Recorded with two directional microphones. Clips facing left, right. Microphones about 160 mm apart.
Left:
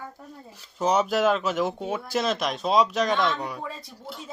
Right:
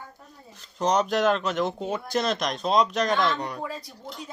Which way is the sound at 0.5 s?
10° left (ahead or behind).